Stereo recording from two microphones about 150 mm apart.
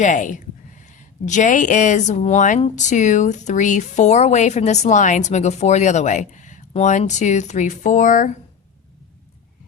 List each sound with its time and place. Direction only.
0.0 s a woman's voice: 55° left (ahead or behind)